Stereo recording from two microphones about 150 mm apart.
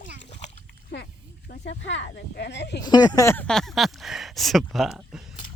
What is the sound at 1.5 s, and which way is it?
Speech, 85° left.